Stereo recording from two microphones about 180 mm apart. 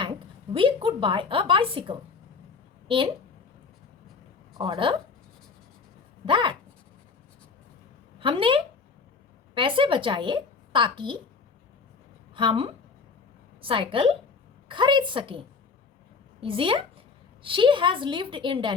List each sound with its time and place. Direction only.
0.5 s a woman's voice: 30° right (ahead or behind)
4.5 s speech: 25° right (ahead or behind)
6.2 s speech: 25° right (ahead or behind)
8.2 s a woman's voice: 30° right (ahead or behind)
12.3 s a woman's voice: 25° right (ahead or behind)